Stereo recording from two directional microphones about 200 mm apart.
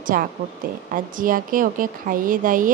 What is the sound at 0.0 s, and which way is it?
A woman's voice, 45° right (ahead or behind).